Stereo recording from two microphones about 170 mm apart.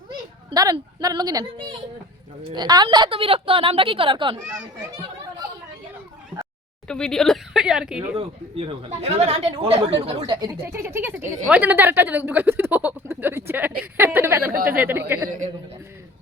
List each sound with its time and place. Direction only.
0.5 s a woman's voice: 20° right (ahead or behind)
6.8 s speech: 5° left (ahead or behind)
8.1 s speech: 35° right (ahead or behind)
10.7 s speech: 15° right (ahead or behind)